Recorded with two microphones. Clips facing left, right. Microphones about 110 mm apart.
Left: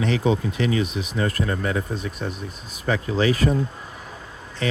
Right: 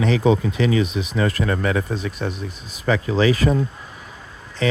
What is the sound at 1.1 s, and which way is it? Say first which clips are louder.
Speech: right 3 dB; 90° right.